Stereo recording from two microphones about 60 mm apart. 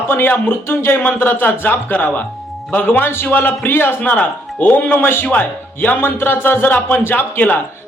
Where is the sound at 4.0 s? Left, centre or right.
Left.